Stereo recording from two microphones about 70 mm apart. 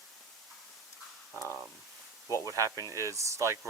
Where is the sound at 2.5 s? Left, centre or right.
Right.